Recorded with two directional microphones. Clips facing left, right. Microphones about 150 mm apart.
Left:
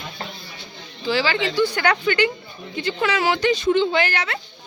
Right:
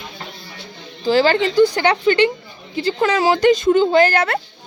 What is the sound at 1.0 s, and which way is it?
Speech, 45° right (ahead or behind).